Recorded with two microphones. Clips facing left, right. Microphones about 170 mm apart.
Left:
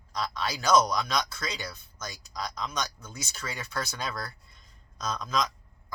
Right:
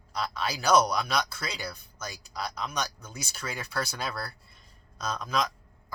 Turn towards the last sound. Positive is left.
turn(degrees=-10)  # may be behind; listen again after turning